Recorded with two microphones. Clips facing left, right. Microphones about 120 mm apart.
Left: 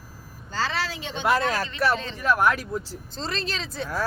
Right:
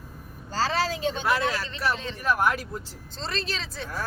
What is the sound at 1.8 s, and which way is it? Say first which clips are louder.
Speech: left 3 dB; 80° left.